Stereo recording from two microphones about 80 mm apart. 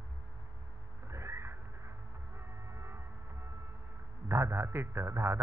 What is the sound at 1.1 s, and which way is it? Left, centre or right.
Cat, right.